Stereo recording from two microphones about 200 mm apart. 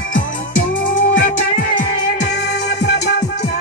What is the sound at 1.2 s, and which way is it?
Music, 40° left (ahead or behind).